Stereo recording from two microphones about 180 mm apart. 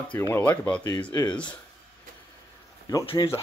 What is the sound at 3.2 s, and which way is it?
Speech, 25° left (ahead or behind).